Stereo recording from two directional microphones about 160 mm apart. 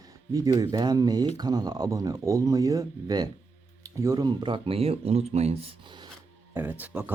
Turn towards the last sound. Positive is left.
turn(degrees=-10)  # may be behind; listen again after turning